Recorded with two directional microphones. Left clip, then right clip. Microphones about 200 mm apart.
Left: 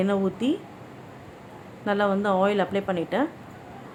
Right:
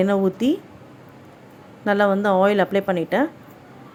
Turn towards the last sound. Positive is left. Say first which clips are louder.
# right 5 dB
turn(degrees=-30)  # may be behind; listen again after turning